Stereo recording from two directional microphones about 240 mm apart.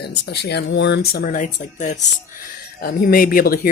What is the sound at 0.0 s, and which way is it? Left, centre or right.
Speech, left.